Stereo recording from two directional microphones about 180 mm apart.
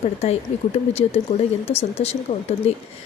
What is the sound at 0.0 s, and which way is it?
A woman's voice, 35° left (ahead or behind).